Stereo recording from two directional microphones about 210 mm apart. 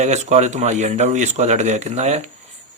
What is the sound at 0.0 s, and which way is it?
Speech, 35° right (ahead or behind).